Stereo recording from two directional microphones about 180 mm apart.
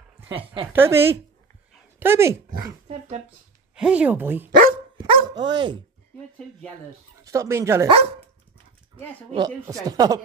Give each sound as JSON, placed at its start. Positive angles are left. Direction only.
{"t": 0.2, "sound": "a woman's voice", "side_deg": -10}
{"t": 3.7, "sound": "speech", "side_deg": -5}
{"t": 5.0, "sound": "dog", "side_deg": -25}
{"t": 7.2, "sound": "speech", "side_deg": -15}
{"t": 9.3, "sound": "speech", "side_deg": -20}